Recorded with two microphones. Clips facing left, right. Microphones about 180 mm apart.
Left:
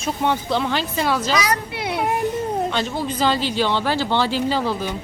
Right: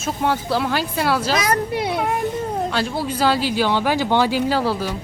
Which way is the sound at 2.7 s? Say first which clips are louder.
Right 1 dB; 5° right (ahead or behind).